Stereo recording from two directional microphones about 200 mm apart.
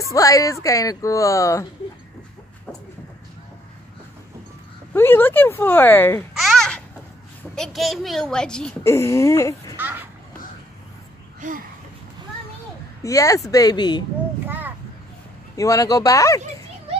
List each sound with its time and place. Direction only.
0.1 s speech: 15° left (ahead or behind)
4.9 s speech: 10° left (ahead or behind)
6.3 s babbling: centre (ahead or behind)
7.5 s a woman's voice: centre (ahead or behind)
9.8 s a child's voice: 10° right (ahead or behind)
13.0 s speech: 15° left (ahead or behind)
15.5 s speech: 15° left (ahead or behind)